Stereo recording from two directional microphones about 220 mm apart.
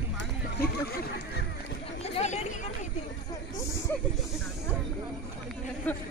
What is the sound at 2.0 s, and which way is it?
Chatter, 30° left (ahead or behind).